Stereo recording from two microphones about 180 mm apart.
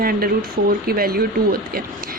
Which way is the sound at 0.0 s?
55° right (ahead or behind).